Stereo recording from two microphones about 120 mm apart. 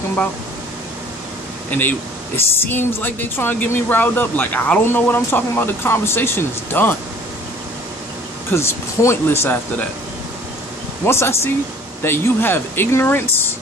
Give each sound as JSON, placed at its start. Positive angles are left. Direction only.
{"t": 1.7, "sound": "speech", "side_deg": 15}
{"t": 8.5, "sound": "speech", "side_deg": 20}
{"t": 11.1, "sound": "speech", "side_deg": 20}